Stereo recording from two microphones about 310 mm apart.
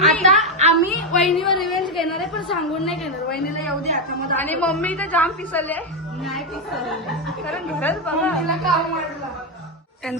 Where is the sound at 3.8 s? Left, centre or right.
Right.